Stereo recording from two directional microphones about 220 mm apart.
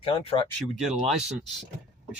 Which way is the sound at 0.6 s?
Centre (ahead or behind).